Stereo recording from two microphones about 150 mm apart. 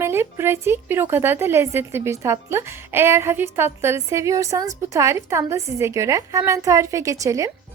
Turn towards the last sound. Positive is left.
turn(degrees=-20)  # may be behind; listen again after turning